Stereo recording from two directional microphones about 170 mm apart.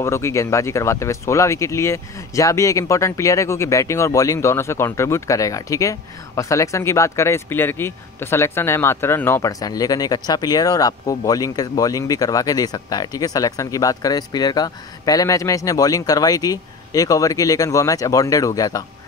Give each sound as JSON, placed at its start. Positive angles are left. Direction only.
{"t": 0.0, "sound": "speech", "side_deg": 15}